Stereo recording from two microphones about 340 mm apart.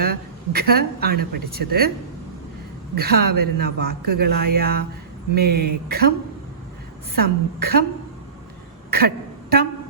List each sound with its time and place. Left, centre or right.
0.0 s speech: right
2.9 s speech: right
3.2 s a man's voice: right
4.1 s speech: right
7.2 s speech: right
8.9 s a sound: right